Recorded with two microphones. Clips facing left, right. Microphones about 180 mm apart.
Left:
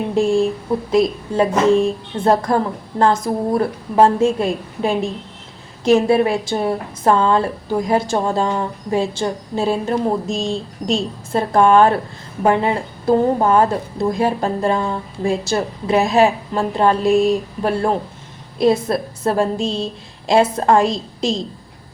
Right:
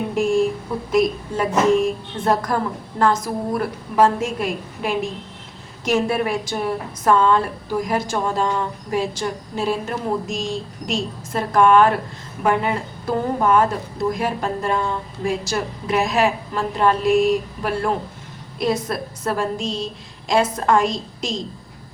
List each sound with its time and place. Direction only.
0.1 s a woman's voice: 30° left (ahead or behind)